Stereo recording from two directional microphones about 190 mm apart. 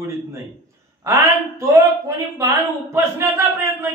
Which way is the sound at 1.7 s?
15° right (ahead or behind).